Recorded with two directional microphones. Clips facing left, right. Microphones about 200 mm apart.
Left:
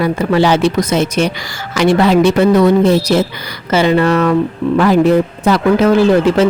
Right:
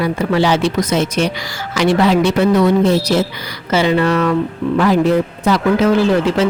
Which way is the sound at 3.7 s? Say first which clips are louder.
Left 3 dB; 50° left (ahead or behind).